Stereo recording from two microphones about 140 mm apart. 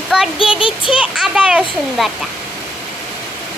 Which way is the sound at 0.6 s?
40° left (ahead or behind).